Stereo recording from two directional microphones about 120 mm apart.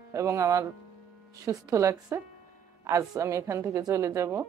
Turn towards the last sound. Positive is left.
turn(degrees=-25)  # may be behind; listen again after turning